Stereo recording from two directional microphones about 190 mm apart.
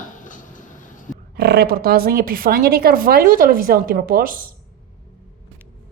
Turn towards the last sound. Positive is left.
turn(degrees=-50)  # may be behind; listen again after turning